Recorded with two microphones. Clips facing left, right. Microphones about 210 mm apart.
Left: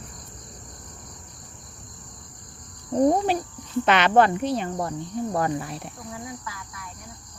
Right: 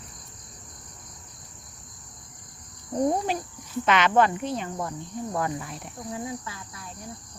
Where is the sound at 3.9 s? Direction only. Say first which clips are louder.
Left 3 dB; 65° left (ahead or behind).